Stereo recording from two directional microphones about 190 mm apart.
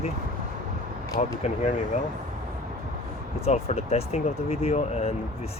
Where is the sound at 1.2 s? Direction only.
40° left (ahead or behind).